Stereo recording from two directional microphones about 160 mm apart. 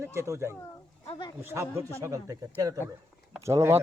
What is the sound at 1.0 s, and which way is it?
Speech, 40° left (ahead or behind).